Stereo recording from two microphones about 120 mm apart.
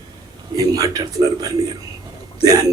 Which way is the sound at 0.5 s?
30° right (ahead or behind).